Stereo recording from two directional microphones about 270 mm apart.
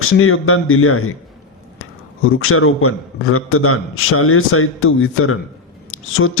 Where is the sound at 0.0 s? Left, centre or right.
Left.